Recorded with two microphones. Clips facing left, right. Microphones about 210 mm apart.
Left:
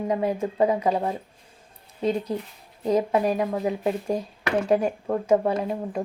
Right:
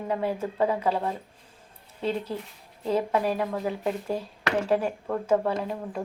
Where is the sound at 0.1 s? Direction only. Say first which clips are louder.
Left 1 dB; 15° left (ahead or behind).